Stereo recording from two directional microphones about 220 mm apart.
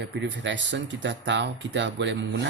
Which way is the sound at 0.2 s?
55° right (ahead or behind).